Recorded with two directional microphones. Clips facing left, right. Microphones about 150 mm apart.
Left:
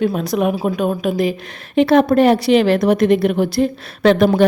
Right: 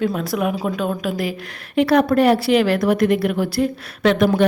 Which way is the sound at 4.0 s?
35° left (ahead or behind).